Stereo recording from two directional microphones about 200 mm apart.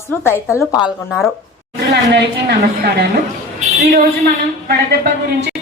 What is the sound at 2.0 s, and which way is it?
Speech, 60° right (ahead or behind).